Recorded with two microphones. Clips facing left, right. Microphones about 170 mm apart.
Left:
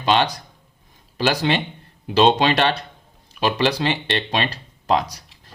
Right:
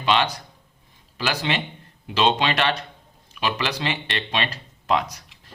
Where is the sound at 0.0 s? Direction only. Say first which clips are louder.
Left 3 dB; 35° left (ahead or behind).